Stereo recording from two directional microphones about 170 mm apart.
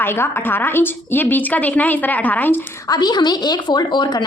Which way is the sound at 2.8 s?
25° left (ahead or behind).